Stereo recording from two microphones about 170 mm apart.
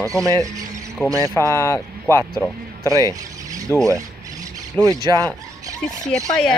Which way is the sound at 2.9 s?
20° right (ahead or behind).